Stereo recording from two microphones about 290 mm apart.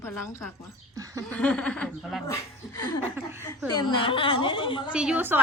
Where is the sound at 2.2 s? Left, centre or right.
Centre.